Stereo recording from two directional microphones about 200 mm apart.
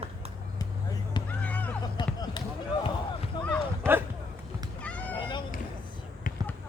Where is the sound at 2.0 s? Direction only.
25° left (ahead or behind).